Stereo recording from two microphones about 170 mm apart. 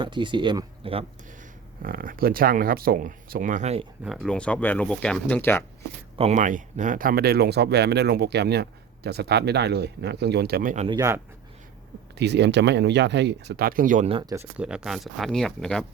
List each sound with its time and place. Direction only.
0.0 s speech: 30° right (ahead or behind)
1.8 s speech: 55° right (ahead or behind); by 3.8 s 40° right (ahead or behind)
4.0 s speech: centre (ahead or behind)
6.1 s speech: 40° right (ahead or behind)
10.8 s speech: 20° right (ahead or behind)
12.1 s speech: 85° right; by 14.1 s 50° right (ahead or behind)
14.1 s speech: 30° right (ahead or behind)
14.3 s speech: 5° right (ahead or behind)